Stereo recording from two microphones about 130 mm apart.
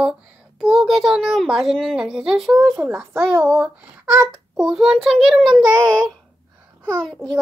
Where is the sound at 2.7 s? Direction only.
20° right (ahead or behind).